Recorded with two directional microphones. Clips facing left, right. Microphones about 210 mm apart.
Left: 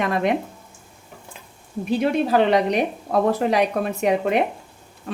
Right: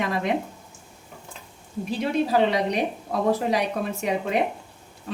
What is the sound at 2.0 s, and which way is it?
A woman's voice, 60° left (ahead or behind).